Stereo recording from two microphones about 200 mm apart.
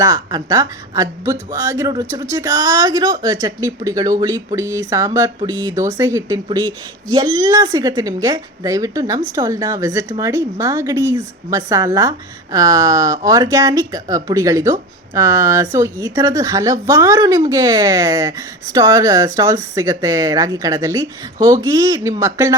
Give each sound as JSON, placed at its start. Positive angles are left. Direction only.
{"t": 0.0, "sound": "speech", "side_deg": -20}